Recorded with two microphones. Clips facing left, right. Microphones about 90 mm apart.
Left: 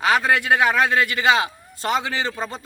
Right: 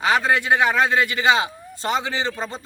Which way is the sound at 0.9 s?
20° right (ahead or behind).